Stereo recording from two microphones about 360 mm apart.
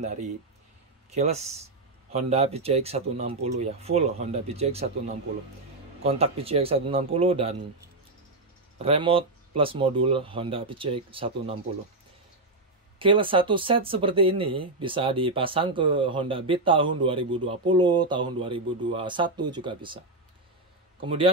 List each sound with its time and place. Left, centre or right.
1.1 s speech: centre
8.7 s speech: centre
13.0 s speech: centre